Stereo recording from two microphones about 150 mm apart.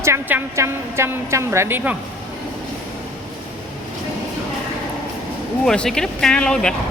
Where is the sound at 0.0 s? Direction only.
15° right (ahead or behind).